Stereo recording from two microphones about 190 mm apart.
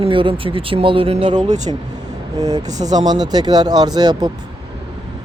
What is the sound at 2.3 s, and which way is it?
Speech, 20° right (ahead or behind).